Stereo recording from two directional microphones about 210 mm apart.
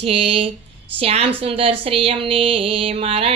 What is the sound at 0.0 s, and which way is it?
Music, 25° right (ahead or behind).